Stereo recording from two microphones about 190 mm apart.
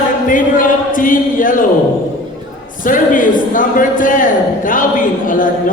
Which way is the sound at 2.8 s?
45° left (ahead or behind).